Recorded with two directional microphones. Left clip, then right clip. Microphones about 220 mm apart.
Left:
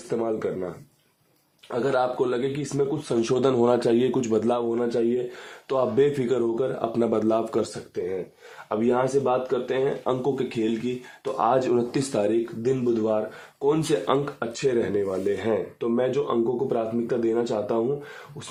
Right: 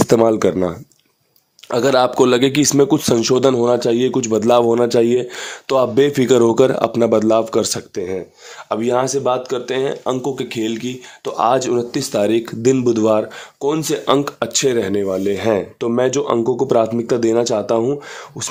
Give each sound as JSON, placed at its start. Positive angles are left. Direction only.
{"t": 0.1, "sound": "speech", "side_deg": -50}
{"t": 1.7, "sound": "speech", "side_deg": -45}
{"t": 3.2, "sound": "speech", "side_deg": -30}
{"t": 4.7, "sound": "speech", "side_deg": -55}
{"t": 5.6, "sound": "speech", "side_deg": -35}
{"t": 6.9, "sound": "speech", "side_deg": -30}
{"t": 8.7, "sound": "speech", "side_deg": -40}
{"t": 12.3, "sound": "speech", "side_deg": -50}
{"t": 13.6, "sound": "speech", "side_deg": -30}